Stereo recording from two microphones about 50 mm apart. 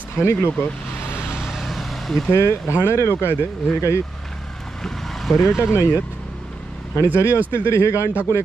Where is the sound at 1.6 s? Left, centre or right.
Centre.